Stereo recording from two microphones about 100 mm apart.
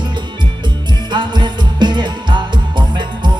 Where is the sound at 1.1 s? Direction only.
50° right (ahead or behind).